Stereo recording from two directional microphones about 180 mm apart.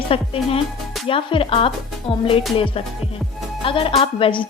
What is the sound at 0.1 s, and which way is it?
A woman's voice, 35° left (ahead or behind).